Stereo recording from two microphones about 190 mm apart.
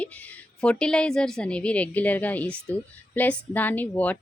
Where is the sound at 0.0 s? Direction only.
10° left (ahead or behind).